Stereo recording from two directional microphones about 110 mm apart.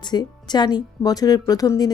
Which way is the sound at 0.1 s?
40° left (ahead or behind).